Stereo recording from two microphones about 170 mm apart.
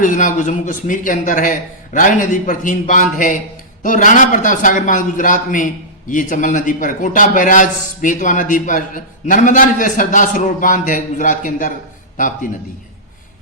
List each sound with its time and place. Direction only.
0.0 s a man's voice: 50° left (ahead or behind)